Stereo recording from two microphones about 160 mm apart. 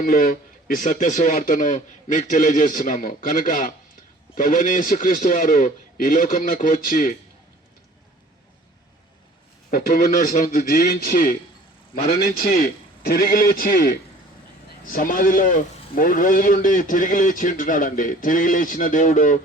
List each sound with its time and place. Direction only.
0.0 s a man's voice: 60° left (ahead or behind)
9.6 s a man's voice: 60° left (ahead or behind)
12.5 s a man's voice: 65° left (ahead or behind)